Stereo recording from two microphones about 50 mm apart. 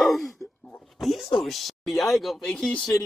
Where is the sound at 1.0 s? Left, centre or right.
Centre.